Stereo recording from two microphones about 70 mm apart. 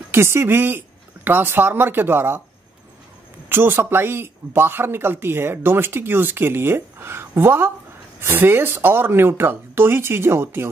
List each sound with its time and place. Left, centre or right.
0.1 s speech: right
3.4 s speech: right